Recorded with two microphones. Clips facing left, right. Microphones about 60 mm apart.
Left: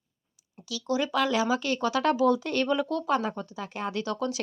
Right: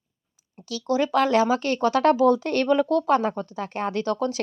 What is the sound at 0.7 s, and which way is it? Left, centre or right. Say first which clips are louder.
Speech: right 5 dB; right.